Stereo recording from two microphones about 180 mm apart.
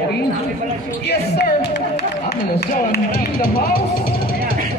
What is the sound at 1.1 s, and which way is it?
Speech, 65° left (ahead or behind).